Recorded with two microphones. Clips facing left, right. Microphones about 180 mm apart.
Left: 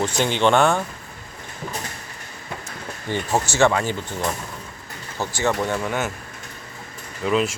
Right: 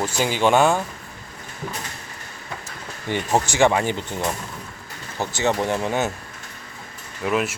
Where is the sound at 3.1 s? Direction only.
15° right (ahead or behind).